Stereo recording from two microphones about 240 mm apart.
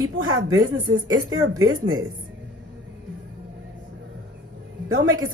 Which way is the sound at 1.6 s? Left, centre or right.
Right.